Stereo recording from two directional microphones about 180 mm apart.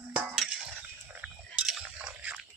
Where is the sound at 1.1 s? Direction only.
5° right (ahead or behind).